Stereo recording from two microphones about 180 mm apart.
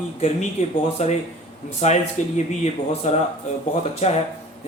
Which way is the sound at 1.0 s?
40° left (ahead or behind).